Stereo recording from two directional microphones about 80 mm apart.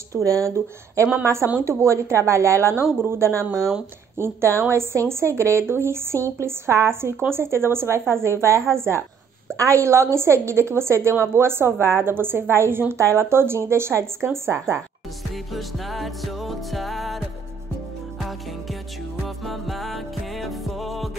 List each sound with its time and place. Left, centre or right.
0.1 s a woman's voice: right
15.3 s music: centre
19.2 s music: centre